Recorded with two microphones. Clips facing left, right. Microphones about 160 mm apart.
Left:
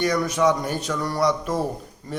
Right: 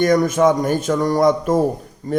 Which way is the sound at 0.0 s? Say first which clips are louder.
Right 6 dB; 50° right (ahead or behind).